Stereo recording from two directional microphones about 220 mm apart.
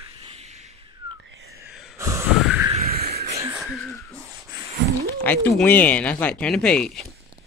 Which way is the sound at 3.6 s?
Centre (ahead or behind).